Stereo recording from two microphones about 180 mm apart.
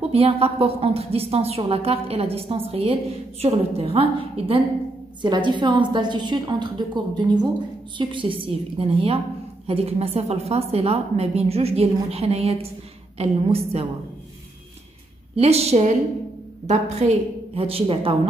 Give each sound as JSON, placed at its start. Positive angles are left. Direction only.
{"t": 0.1, "sound": "a woman's voice", "side_deg": -35}
{"t": 15.3, "sound": "a woman's voice", "side_deg": -35}